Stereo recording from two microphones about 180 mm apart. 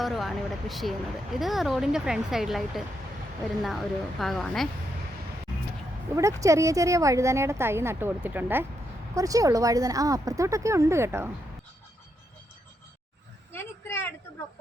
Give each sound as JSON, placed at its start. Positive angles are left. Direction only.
{"t": 0.0, "sound": "speech", "side_deg": 0}
{"t": 6.1, "sound": "a woman's voice", "side_deg": -15}
{"t": 13.5, "sound": "a sound", "side_deg": 15}